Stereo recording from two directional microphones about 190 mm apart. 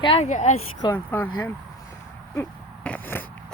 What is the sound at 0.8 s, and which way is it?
Speech, 10° left (ahead or behind).